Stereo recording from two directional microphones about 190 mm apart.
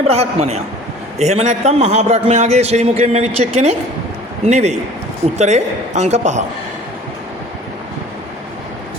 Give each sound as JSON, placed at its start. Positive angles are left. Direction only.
{"t": 0.1, "sound": "a man's voice", "side_deg": -35}